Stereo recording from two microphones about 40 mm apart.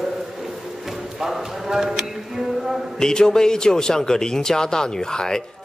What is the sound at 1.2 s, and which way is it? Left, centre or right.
Speech, centre.